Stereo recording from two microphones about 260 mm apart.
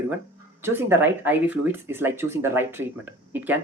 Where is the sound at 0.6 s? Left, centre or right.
Centre.